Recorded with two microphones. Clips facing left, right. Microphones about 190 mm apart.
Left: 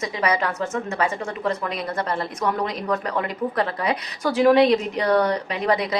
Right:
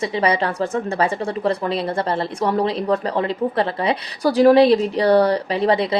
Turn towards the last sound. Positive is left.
turn(degrees=-30)  # may be behind; listen again after turning